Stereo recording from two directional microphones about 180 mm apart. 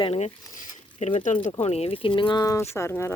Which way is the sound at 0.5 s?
40° left (ahead or behind).